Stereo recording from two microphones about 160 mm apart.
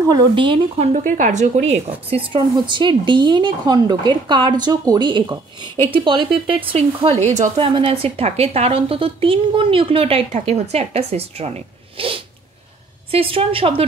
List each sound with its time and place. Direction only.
0.0 s a woman's voice: 25° right (ahead or behind)
0.9 s a woman's voice: 55° right (ahead or behind); by 13.8 s 35° right (ahead or behind)